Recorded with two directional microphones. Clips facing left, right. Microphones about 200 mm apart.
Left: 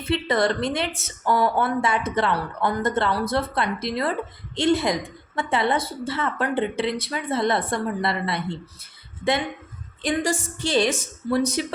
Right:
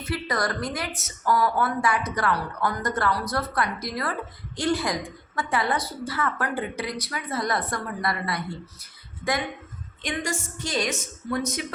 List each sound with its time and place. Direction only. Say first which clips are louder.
0.0 s a woman's voice: left 6 dB; 25° left (ahead or behind)
10.0 s a woman's voice: left 6 dB; 30° left (ahead or behind)